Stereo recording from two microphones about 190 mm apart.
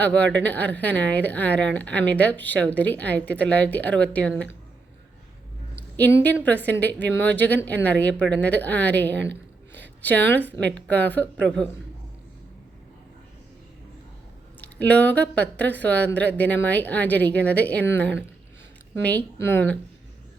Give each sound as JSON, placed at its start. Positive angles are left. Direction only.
{"t": 0.0, "sound": "speech", "side_deg": 10}
{"t": 6.0, "sound": "speech", "side_deg": 10}
{"t": 9.1, "sound": "a woman's voice", "side_deg": -65}
{"t": 9.7, "sound": "a sound", "side_deg": 10}
{"t": 10.6, "sound": "speech", "side_deg": 5}
{"t": 14.8, "sound": "speech", "side_deg": 10}